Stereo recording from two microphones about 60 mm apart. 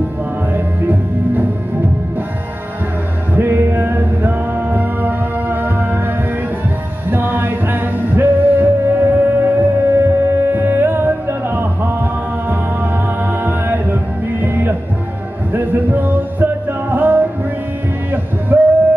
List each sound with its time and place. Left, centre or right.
0.5 s music: right
3.3 s music: right
18.5 s a sound: right